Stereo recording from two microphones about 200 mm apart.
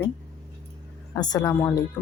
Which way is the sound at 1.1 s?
15° left (ahead or behind).